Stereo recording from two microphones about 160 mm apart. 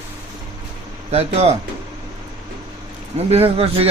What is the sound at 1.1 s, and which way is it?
Speech, 40° right (ahead or behind).